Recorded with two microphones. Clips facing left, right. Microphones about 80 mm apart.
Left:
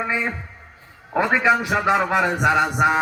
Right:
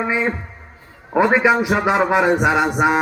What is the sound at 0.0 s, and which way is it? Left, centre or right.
A man's voice, centre.